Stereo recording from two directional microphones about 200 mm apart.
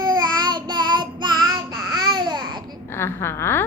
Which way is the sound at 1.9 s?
20° right (ahead or behind).